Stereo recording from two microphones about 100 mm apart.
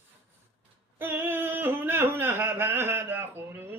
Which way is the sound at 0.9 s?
20° right (ahead or behind).